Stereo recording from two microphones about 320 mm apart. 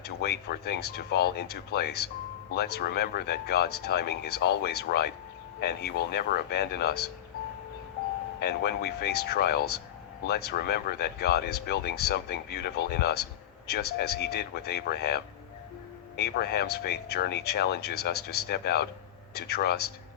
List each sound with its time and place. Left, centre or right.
0.0 s speech: left
8.4 s a man's voice: left